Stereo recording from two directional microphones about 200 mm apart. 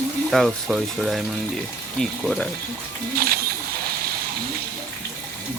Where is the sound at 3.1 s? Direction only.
50° right (ahead or behind).